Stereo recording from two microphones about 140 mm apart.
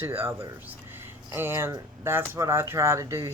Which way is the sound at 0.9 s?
15° right (ahead or behind).